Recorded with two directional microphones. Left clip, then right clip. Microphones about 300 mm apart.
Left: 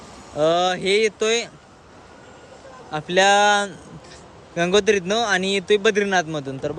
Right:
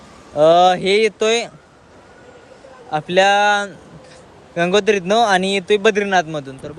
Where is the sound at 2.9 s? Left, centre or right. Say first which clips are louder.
Right 3 dB; centre.